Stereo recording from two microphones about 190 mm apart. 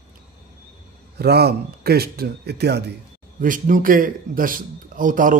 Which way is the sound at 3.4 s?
45° right (ahead or behind).